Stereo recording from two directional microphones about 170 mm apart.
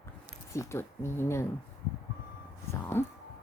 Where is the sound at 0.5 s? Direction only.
15° left (ahead or behind).